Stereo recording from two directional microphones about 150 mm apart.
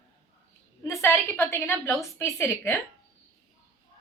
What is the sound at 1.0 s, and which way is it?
A woman's voice, 15° left (ahead or behind).